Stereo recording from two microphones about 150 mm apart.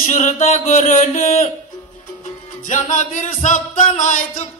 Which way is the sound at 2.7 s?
55° left (ahead or behind).